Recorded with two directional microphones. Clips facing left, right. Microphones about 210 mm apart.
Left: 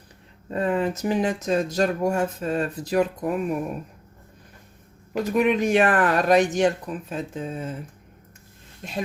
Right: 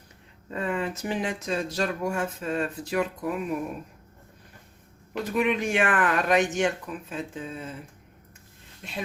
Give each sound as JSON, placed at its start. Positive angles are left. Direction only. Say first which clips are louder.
{"t": 0.5, "sound": "speech", "louder": "left 6 dB", "side_deg": 40}
{"t": 5.1, "sound": "speech", "louder": "left 5 dB", "side_deg": 40}
{"t": 8.8, "sound": "speech", "louder": "left 5 dB", "side_deg": 45}